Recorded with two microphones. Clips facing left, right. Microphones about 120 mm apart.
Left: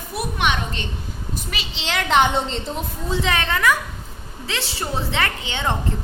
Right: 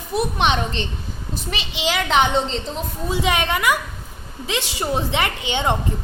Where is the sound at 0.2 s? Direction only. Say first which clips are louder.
Right 3 dB; 25° right (ahead or behind).